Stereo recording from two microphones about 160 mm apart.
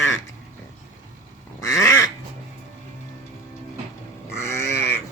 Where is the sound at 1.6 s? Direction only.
20° left (ahead or behind).